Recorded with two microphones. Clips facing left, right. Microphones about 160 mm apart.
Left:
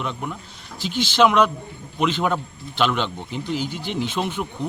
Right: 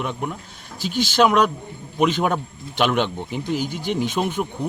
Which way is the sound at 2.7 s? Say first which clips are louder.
Right 2 dB; 50° right (ahead or behind).